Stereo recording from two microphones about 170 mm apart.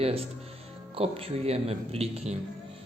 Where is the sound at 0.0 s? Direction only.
35° right (ahead or behind).